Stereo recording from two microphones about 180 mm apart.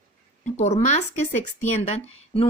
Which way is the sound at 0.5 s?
40° left (ahead or behind).